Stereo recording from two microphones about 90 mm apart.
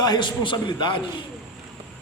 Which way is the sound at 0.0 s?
55° left (ahead or behind).